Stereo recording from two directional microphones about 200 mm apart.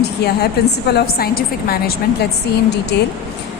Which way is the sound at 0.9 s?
50° left (ahead or behind).